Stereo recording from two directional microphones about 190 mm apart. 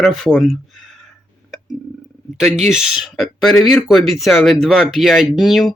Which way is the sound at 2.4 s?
5° right (ahead or behind).